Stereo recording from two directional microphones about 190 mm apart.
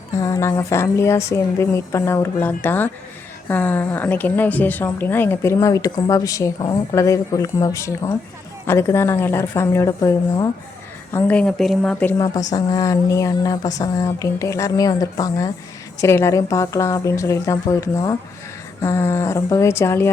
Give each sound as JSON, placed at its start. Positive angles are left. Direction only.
{"t": 0.1, "sound": "a woman's voice", "side_deg": 15}
{"t": 12.1, "sound": "speech", "side_deg": 20}